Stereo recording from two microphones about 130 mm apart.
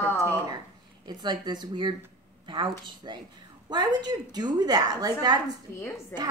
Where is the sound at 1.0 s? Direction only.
35° right (ahead or behind).